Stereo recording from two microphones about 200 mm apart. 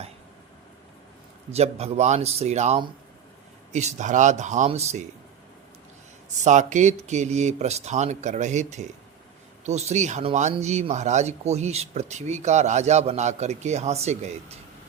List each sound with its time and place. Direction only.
1.5 s speech: 30° right (ahead or behind)
6.4 s speech: 35° right (ahead or behind)